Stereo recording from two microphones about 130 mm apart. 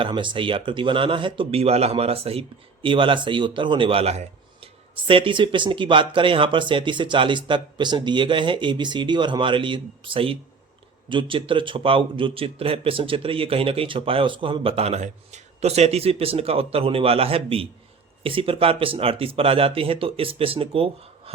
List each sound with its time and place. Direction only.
0.0 s a man's voice: 40° right (ahead or behind)